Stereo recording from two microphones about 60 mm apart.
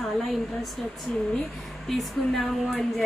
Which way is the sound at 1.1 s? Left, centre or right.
Centre.